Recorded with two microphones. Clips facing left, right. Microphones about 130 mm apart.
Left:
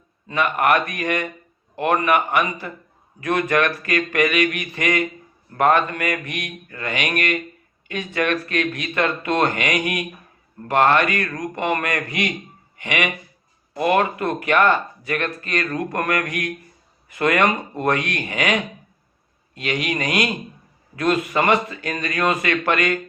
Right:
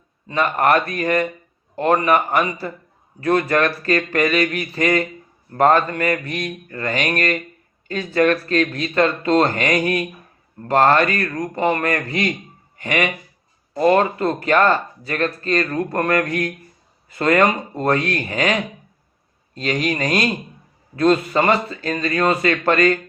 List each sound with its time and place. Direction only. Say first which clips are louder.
0.3 s speech: right 2 dB; 35° right (ahead or behind)